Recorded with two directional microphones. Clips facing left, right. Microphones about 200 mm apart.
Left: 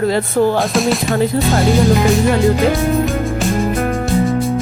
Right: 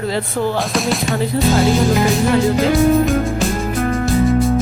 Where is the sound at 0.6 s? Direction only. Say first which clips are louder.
Left 3 dB; centre (ahead or behind).